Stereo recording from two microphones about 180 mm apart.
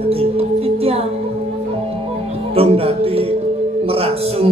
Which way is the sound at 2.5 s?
35° right (ahead or behind).